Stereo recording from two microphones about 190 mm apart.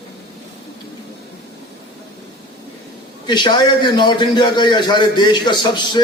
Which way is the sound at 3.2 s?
25° left (ahead or behind).